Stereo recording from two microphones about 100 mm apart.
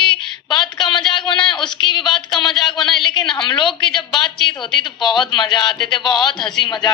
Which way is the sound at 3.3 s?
55° left (ahead or behind).